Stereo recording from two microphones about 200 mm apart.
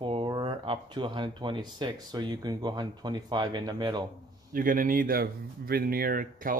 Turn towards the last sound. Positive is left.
turn(degrees=-45)  # may be behind; listen again after turning